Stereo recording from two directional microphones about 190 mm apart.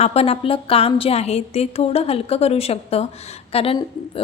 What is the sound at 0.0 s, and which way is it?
A woman's voice, 30° left (ahead or behind).